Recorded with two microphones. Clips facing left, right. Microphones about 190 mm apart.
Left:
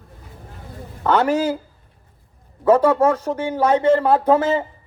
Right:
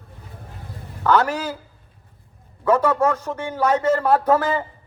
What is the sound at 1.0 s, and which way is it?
Speech, 25° left (ahead or behind).